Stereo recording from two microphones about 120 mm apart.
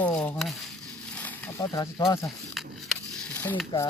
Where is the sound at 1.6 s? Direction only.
35° left (ahead or behind).